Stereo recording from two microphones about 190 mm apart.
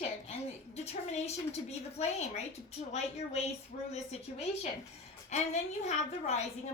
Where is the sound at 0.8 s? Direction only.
35° left (ahead or behind).